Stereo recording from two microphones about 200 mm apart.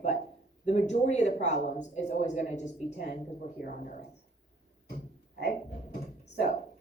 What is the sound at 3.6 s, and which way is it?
Speech, 50° left (ahead or behind).